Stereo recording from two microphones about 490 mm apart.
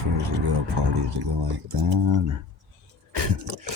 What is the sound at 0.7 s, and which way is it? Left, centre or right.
Speech, right.